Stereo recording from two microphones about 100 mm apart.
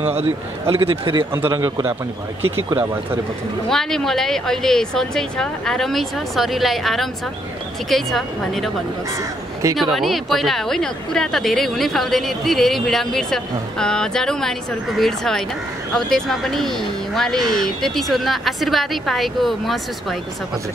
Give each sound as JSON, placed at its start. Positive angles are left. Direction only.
{"t": 0.7, "sound": "a man's voice", "side_deg": -60}
{"t": 1.5, "sound": "a man's voice", "side_deg": -40}
{"t": 2.4, "sound": "speech", "side_deg": -25}
{"t": 3.6, "sound": "a woman's voice", "side_deg": 5}
{"t": 9.9, "sound": "a woman's voice", "side_deg": 0}